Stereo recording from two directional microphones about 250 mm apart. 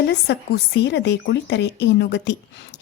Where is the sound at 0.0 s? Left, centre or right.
Left.